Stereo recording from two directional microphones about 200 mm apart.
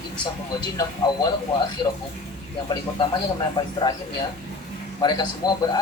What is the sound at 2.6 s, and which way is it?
Speech, 25° left (ahead or behind).